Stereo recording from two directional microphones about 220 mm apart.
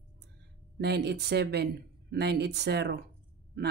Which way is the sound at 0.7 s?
50° right (ahead or behind).